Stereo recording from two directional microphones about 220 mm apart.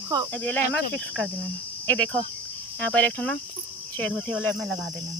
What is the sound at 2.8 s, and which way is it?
Speech, 5° left (ahead or behind).